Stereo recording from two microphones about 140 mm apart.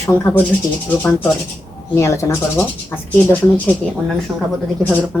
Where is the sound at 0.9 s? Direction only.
15° left (ahead or behind).